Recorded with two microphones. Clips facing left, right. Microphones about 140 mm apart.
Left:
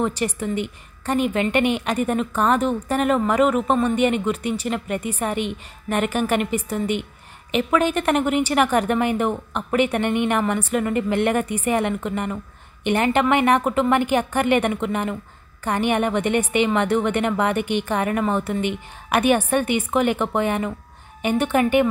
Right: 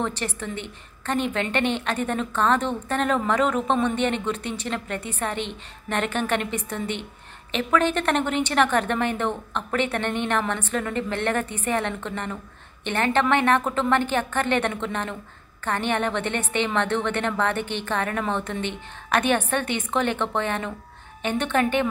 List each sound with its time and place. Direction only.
0.0 s a woman's voice: 10° left (ahead or behind)